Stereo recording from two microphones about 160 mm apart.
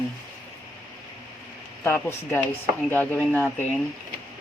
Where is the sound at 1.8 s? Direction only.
15° left (ahead or behind).